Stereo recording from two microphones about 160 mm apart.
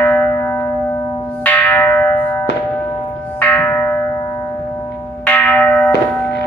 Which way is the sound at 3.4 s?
10° left (ahead or behind).